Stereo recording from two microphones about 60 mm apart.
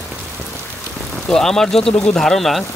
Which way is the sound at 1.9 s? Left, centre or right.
Left.